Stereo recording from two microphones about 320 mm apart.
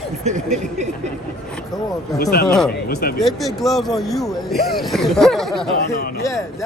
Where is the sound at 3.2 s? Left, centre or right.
Centre.